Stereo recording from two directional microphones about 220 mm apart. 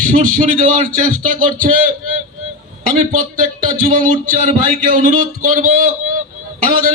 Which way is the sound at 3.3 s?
40° right (ahead or behind).